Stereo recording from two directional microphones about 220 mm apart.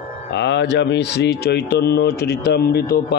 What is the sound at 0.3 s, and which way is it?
Speech, 50° left (ahead or behind).